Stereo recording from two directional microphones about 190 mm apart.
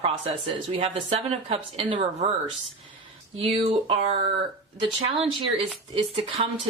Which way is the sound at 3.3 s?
30° right (ahead or behind).